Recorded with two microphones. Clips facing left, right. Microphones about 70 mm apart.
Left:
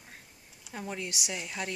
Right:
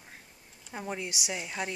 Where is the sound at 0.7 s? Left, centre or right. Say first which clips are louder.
Right 1 dB; centre.